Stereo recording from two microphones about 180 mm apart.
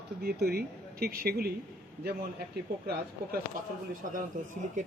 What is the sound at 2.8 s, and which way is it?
Speech, 60° right (ahead or behind).